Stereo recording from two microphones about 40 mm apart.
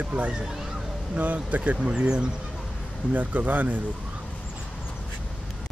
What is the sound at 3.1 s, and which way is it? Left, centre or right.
Speech, right.